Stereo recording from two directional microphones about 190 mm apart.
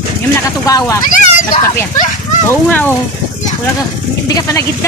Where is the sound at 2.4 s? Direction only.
10° left (ahead or behind).